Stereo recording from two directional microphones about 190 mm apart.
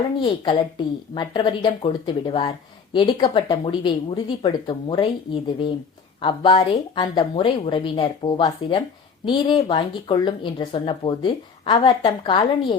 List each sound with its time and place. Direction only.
0.2 s speech: 25° left (ahead or behind)